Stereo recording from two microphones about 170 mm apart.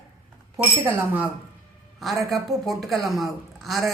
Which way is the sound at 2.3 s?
Centre (ahead or behind).